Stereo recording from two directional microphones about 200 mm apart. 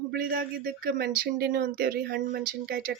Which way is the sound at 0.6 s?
45° right (ahead or behind).